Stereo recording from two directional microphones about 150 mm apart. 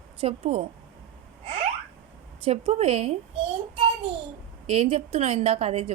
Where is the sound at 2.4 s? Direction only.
45° right (ahead or behind).